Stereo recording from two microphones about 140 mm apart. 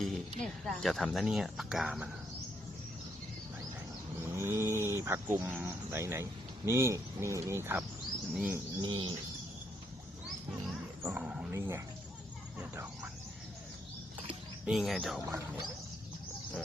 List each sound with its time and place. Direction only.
0.0 s speech: 5° left (ahead or behind)
4.4 s speech: 20° right (ahead or behind)
8.8 s bird: 30° right (ahead or behind)
11.0 s dog: 10° right (ahead or behind)
11.5 s speech: 20° right (ahead or behind)
12.5 s a sound: 10° right (ahead or behind)
14.7 s speech: centre (ahead or behind)